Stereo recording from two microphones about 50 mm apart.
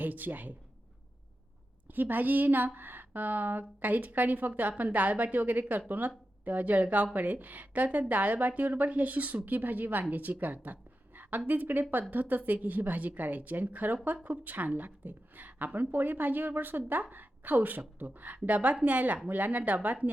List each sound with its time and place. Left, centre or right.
0.0 s speech: right
1.9 s speech: right